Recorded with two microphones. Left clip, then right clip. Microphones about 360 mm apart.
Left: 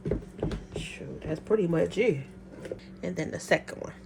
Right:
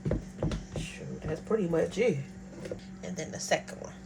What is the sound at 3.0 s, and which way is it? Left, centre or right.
Speech, left.